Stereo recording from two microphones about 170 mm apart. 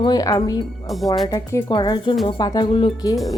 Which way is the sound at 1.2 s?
20° left (ahead or behind).